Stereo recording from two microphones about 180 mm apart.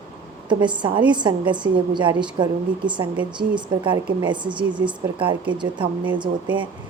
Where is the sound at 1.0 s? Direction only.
25° right (ahead or behind).